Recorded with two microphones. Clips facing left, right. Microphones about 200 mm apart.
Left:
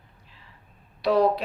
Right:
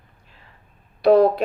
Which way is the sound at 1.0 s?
50° right (ahead or behind).